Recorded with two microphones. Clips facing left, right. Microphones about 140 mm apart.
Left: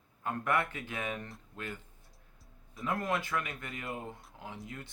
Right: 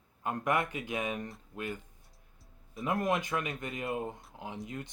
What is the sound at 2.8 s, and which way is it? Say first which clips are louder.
Speech: right 3 dB; 20° right (ahead or behind).